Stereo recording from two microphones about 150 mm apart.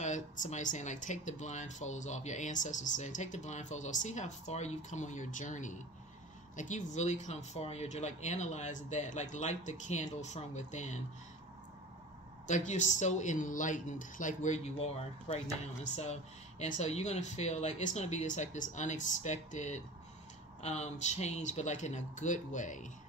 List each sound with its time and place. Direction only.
0.0 s speech: 55° left (ahead or behind)
12.4 s speech: 55° left (ahead or behind)